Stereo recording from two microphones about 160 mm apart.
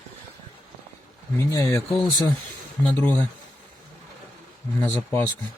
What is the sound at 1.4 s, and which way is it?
Speech, 20° left (ahead or behind).